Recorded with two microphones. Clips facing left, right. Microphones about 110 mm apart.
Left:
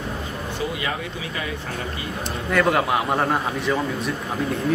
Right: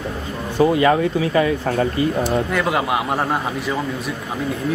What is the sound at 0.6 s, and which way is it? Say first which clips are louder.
Speech: right 14 dB; 40° right (ahead or behind).